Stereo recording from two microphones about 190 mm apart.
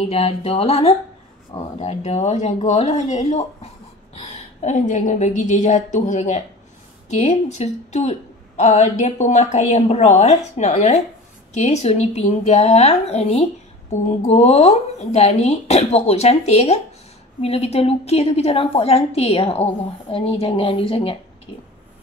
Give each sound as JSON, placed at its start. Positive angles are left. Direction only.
{"t": 0.1, "sound": "a woman's voice", "side_deg": 30}